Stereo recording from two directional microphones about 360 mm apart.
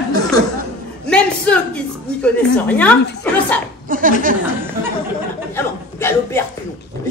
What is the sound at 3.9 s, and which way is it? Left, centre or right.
Speech, right.